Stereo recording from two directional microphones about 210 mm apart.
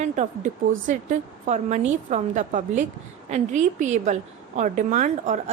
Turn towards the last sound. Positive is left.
turn(degrees=-35)  # may be behind; listen again after turning